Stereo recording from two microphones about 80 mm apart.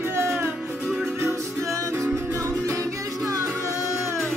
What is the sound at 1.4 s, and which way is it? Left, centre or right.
Music, right.